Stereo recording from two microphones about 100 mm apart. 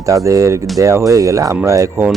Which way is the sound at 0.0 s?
30° right (ahead or behind).